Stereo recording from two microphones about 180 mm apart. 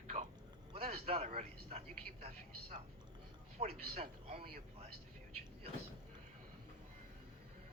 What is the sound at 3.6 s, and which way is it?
Speech, 35° right (ahead or behind).